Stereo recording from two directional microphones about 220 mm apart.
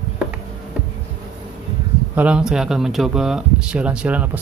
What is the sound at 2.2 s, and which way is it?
Speech, 5° right (ahead or behind).